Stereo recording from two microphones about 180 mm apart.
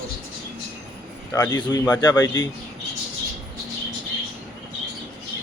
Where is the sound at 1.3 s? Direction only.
20° left (ahead or behind).